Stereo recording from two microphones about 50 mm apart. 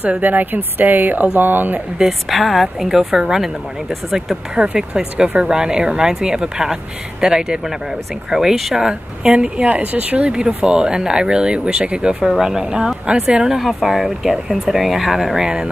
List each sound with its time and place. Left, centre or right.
0.0 s speech: right
2.0 s speech: centre
4.6 s speech: centre
10.3 s speech: centre
13.6 s speech: centre